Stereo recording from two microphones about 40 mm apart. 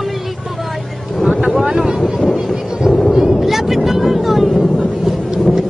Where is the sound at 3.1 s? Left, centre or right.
Centre.